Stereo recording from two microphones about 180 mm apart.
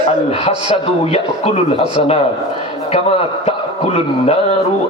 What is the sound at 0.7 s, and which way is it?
A man's voice, 35° left (ahead or behind).